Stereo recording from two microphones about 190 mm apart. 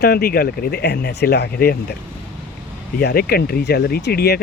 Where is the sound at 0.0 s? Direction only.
55° left (ahead or behind).